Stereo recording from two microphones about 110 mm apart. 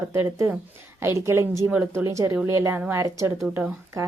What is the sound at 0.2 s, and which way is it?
A woman's voice, 20° right (ahead or behind).